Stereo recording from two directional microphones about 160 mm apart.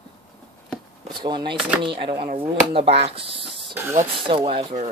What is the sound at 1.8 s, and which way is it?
Speech, 30° right (ahead or behind).